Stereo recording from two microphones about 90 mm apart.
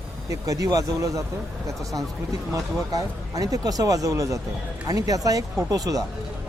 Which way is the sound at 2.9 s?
40° right (ahead or behind).